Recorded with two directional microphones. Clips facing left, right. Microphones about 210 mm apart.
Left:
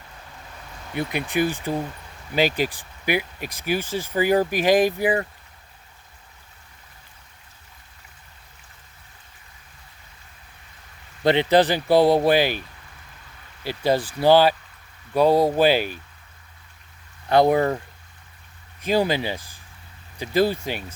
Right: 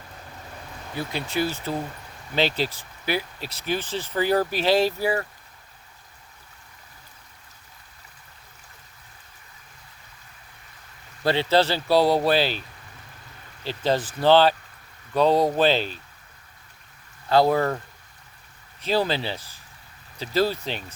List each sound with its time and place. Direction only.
0.9 s speech: 15° left (ahead or behind)
11.2 s speech: 20° left (ahead or behind)
13.7 s speech: 10° left (ahead or behind)
17.2 s speech: 20° left (ahead or behind)
18.9 s speech: 15° left (ahead or behind)